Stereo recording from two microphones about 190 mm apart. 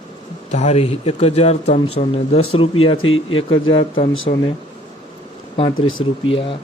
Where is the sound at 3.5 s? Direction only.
25° left (ahead or behind).